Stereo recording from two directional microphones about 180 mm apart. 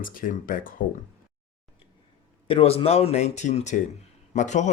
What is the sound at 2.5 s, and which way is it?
Speech, 30° left (ahead or behind).